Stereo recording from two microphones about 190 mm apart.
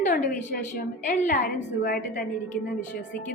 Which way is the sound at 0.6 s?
40° left (ahead or behind).